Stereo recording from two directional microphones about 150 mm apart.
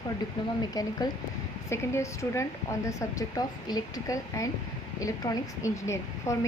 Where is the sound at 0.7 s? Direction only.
25° left (ahead or behind).